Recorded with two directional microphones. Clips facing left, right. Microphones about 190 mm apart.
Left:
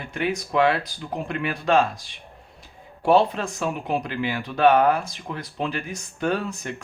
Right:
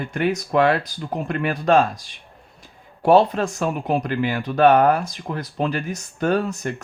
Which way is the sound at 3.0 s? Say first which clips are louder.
Right 3 dB; 45° right (ahead or behind).